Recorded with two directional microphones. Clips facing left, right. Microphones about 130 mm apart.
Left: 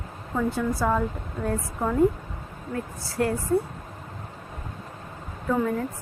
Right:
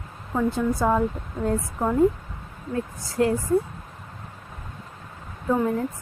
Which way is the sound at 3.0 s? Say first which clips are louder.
Right 4 dB; 15° right (ahead or behind).